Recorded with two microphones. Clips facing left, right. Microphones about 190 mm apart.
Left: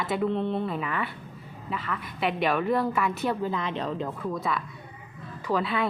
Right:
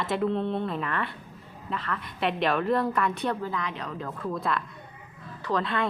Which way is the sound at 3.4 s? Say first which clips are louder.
Left 3 dB; 20° left (ahead or behind).